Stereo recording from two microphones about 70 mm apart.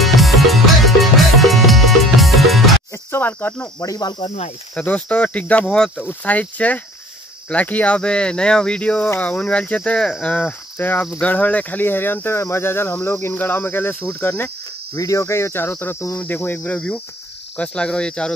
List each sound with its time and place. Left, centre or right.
0.0 s music: centre
3.1 s speech: left
4.7 s speech: centre
10.8 s speech: left
11.8 s cricket: left
15.0 s cricket: left
16.2 s speech: left